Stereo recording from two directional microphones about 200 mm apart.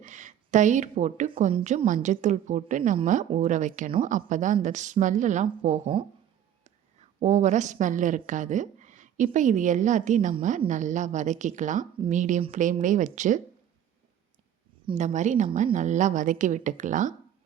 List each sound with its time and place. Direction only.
0.0 s a woman's voice: 40° right (ahead or behind)
7.2 s a woman's voice: 35° right (ahead or behind)
14.8 s a woman's voice: 35° right (ahead or behind)